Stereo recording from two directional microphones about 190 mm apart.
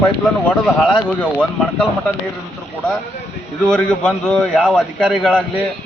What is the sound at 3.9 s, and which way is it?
A man's voice, 5° left (ahead or behind).